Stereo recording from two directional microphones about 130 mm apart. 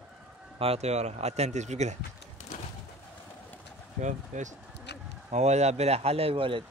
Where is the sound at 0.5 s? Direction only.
50° right (ahead or behind).